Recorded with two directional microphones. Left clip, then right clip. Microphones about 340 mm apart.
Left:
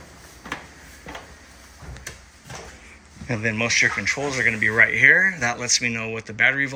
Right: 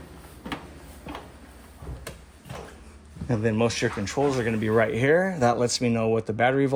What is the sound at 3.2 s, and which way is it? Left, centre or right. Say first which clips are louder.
Speech: left 1 dB; centre.